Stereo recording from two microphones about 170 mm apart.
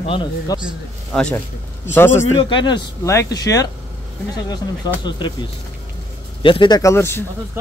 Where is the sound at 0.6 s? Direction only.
5° left (ahead or behind).